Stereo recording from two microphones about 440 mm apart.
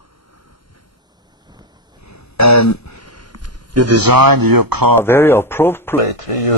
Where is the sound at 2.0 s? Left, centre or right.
Left.